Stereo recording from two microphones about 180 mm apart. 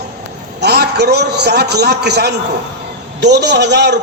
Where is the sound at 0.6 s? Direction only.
65° right (ahead or behind).